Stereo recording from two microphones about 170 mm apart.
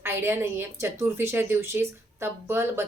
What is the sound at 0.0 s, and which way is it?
A woman's voice, 15° right (ahead or behind).